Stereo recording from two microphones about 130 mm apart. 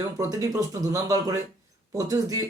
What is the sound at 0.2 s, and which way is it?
Speech, 25° right (ahead or behind).